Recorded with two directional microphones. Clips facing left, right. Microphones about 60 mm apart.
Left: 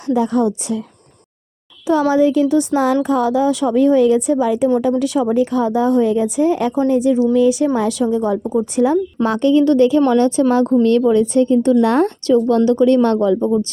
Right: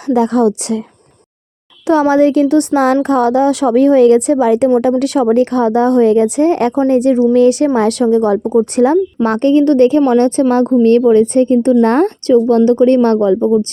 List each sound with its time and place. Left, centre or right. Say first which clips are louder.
0.1 s speech: right 4 dB; right
1.9 s a woman's voice: right 4 dB; right
9.2 s a woman's voice: right 2 dB; right